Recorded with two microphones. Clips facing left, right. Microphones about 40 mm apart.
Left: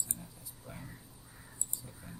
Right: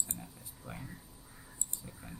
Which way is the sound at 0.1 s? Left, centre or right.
Right.